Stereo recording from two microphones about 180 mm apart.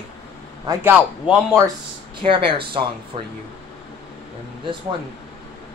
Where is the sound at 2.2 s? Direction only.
30° right (ahead or behind).